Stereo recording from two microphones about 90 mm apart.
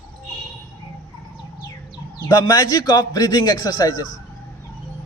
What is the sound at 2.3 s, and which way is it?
A man's voice, 45° left (ahead or behind).